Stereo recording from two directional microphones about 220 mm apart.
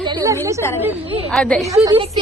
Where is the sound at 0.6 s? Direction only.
10° left (ahead or behind).